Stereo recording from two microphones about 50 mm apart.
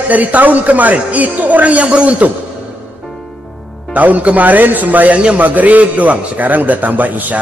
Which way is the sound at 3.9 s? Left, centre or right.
Right.